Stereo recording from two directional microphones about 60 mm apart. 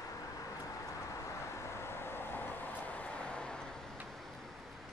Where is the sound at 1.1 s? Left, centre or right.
Left; by 3.8 s centre.